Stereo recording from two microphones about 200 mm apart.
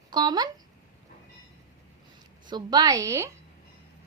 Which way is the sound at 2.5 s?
20° right (ahead or behind).